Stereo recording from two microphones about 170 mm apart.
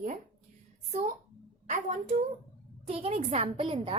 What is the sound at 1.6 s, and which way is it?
A woman's voice, 45° right (ahead or behind).